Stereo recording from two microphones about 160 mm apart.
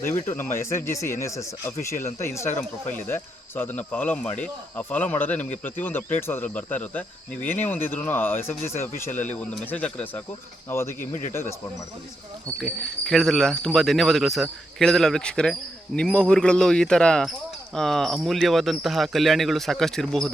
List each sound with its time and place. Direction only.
0.0 s speech: 15° left (ahead or behind)
12.5 s speech: centre (ahead or behind)